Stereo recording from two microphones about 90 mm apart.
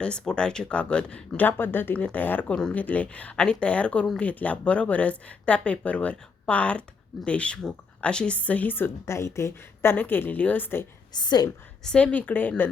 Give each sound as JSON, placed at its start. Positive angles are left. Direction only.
{"t": 0.0, "sound": "speech", "side_deg": 10}
{"t": 2.6, "sound": "speech", "side_deg": 10}
{"t": 11.1, "sound": "a woman's voice", "side_deg": 50}
{"t": 11.8, "sound": "speech", "side_deg": 10}